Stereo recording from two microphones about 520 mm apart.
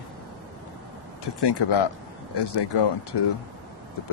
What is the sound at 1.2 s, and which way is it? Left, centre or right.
Speech, left.